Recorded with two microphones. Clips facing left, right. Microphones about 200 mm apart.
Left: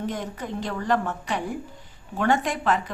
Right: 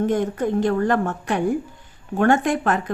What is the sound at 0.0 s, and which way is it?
A woman's voice, 50° right (ahead or behind).